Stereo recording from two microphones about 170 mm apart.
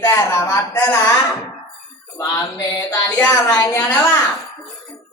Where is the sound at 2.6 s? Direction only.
20° left (ahead or behind).